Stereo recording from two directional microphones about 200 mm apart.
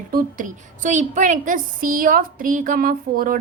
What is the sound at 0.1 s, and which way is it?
A woman's voice, 45° right (ahead or behind).